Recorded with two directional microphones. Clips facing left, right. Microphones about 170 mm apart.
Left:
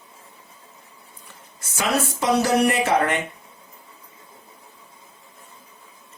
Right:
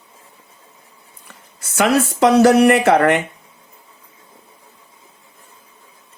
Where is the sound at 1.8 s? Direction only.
65° right (ahead or behind).